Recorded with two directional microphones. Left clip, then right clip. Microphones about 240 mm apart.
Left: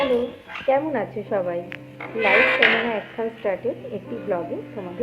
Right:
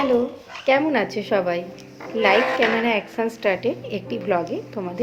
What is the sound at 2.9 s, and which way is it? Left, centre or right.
A woman's voice, right.